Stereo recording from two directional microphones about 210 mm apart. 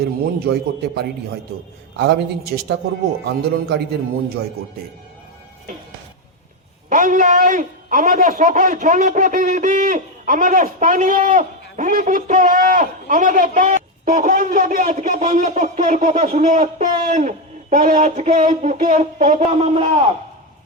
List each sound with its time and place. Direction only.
0.0 s a man's voice: 50° right (ahead or behind)
6.9 s a man's voice: 40° right (ahead or behind)